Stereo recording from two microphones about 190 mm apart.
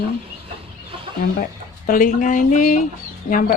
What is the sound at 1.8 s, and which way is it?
Speech, 45° left (ahead or behind).